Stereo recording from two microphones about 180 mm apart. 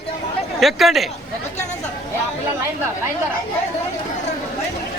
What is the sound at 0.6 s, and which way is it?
Speech, centre (ahead or behind).